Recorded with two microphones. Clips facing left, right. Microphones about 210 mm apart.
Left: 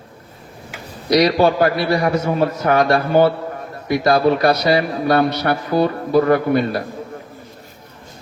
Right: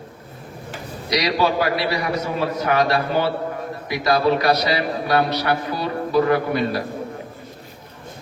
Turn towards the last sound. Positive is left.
turn(degrees=50)  # may be behind; listen again after turning